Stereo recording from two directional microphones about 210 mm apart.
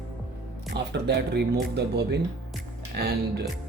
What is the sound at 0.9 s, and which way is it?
Speech, 55° right (ahead or behind).